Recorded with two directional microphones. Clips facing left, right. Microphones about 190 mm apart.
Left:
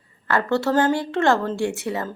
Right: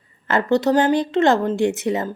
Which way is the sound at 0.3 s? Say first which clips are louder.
Right 3 dB; 20° right (ahead or behind).